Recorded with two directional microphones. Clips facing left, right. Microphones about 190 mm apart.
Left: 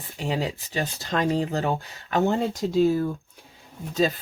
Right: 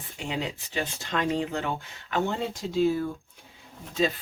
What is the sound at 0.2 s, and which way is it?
Speech, 35° left (ahead or behind).